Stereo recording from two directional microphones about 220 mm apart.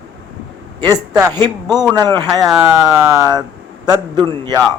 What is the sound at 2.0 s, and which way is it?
A man's voice, 20° right (ahead or behind).